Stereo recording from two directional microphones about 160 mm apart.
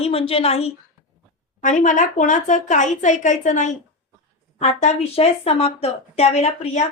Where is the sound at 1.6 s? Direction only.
50° left (ahead or behind).